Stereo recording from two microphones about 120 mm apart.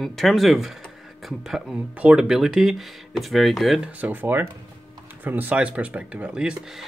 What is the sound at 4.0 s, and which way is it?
Speech, 15° right (ahead or behind).